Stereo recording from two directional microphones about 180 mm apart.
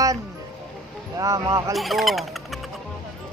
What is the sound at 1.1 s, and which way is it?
Speech, 20° right (ahead or behind).